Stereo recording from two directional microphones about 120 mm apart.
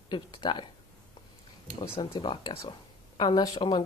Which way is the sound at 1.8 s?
40° left (ahead or behind).